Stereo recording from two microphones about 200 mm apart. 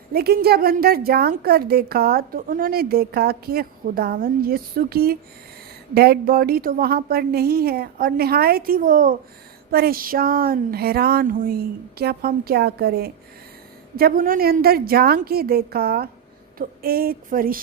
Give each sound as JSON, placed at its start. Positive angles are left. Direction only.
{"t": 0.1, "sound": "a woman's voice", "side_deg": -50}